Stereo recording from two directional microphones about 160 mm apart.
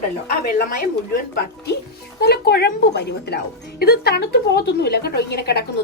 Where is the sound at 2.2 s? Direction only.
85° left.